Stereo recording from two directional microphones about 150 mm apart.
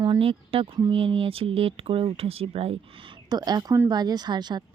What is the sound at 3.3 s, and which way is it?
A woman's voice, 25° right (ahead or behind).